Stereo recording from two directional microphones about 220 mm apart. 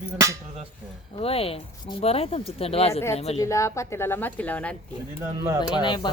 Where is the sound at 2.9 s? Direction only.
10° left (ahead or behind).